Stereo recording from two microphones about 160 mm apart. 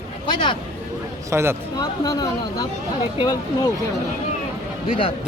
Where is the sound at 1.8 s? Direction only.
25° left (ahead or behind).